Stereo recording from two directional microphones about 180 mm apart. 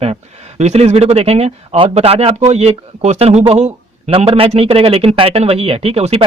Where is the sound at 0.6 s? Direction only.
40° right (ahead or behind).